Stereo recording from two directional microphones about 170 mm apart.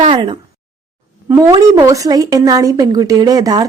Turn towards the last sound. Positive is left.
turn(degrees=-25)  # may be behind; listen again after turning